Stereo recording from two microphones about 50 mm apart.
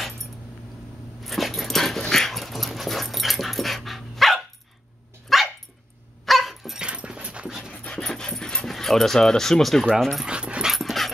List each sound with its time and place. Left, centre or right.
1.2 s dog: centre
6.8 s dog: centre
7.9 s dog: centre
8.6 s speech: centre
10.2 s dog: centre
10.7 s dog: centre